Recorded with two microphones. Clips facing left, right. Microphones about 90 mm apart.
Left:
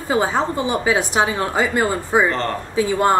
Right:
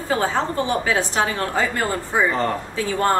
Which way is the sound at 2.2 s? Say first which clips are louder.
Even; 10° right (ahead or behind).